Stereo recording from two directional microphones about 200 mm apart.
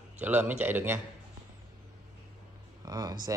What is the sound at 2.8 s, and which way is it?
Speech, 20° right (ahead or behind).